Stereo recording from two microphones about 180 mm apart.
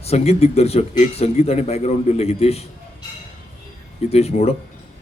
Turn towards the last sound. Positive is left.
turn(degrees=35)  # may be behind; listen again after turning